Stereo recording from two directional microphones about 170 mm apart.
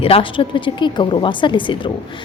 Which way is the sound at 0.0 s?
30° left (ahead or behind).